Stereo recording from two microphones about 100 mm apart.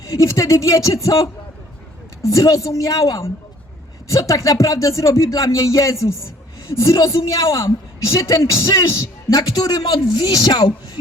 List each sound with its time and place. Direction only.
0.2 s a man's voice: 35° left (ahead or behind)